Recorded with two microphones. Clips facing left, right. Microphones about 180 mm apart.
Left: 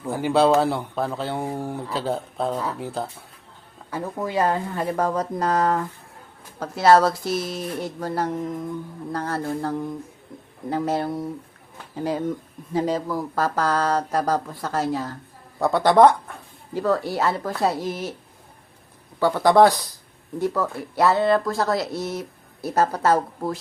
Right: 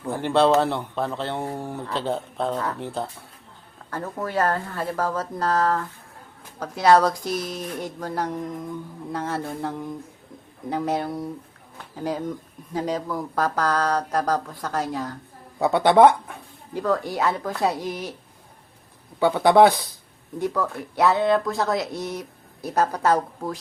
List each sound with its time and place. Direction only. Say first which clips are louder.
0.0 s speech: left 1 dB; 5° left (ahead or behind)
6.6 s speech: left 1 dB; 5° left (ahead or behind)
19.2 s speech: even; centre (ahead or behind)